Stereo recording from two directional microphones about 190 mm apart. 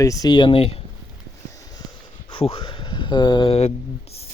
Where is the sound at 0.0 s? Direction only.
20° left (ahead or behind).